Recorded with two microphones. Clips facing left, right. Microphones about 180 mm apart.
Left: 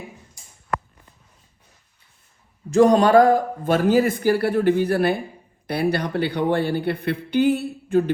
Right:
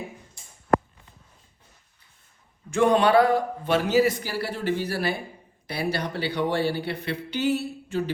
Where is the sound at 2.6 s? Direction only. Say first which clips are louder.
Left 5 dB; 40° left (ahead or behind).